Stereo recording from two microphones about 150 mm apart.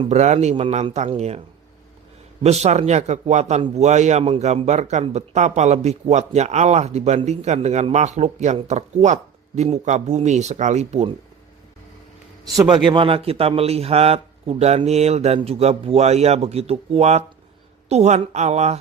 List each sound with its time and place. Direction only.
0.0 s speech: 50° right (ahead or behind)
12.5 s a man's voice: 30° right (ahead or behind); by 18.8 s 50° right (ahead or behind)